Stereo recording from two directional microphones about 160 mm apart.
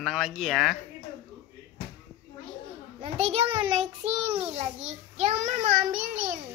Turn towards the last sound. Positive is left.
turn(degrees=-55)  # may be behind; listen again after turning